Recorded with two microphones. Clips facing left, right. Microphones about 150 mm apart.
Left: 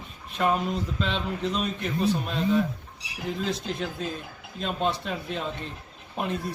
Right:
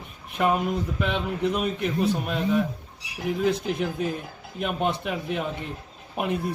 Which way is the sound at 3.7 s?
15° right (ahead or behind).